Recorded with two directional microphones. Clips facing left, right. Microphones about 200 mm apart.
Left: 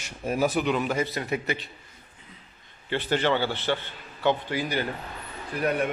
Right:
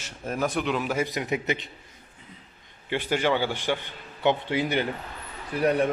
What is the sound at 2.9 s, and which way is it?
Speech, 10° right (ahead or behind).